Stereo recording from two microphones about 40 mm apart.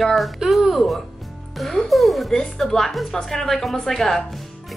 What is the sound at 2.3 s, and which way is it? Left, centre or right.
A woman's voice, centre.